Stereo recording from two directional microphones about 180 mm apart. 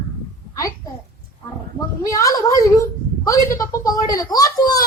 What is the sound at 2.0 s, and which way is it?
A woman's voice, 20° left (ahead or behind).